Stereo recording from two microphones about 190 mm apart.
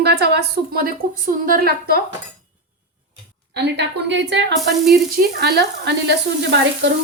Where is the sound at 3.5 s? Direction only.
65° right (ahead or behind).